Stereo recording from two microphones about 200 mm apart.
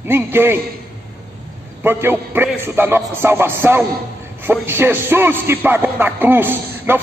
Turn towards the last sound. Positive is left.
turn(degrees=-10)  # may be behind; listen again after turning